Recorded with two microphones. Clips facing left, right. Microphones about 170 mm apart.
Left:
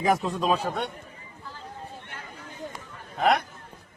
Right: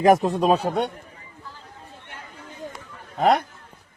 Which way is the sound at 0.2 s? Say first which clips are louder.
Right 5 dB; 45° right (ahead or behind).